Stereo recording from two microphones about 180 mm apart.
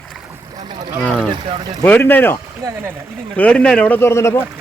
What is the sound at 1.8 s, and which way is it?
Speech, 10° left (ahead or behind).